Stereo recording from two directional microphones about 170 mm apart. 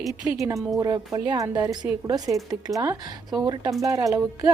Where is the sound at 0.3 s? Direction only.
10° right (ahead or behind).